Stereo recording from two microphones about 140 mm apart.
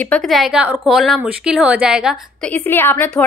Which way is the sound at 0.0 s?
5° left (ahead or behind).